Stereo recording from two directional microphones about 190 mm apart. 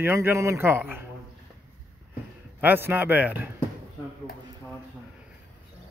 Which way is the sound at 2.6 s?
10° right (ahead or behind).